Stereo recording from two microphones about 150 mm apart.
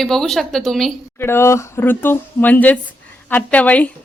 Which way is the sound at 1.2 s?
15° left (ahead or behind).